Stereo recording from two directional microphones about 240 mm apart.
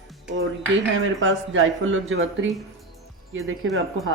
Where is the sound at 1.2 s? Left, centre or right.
Right.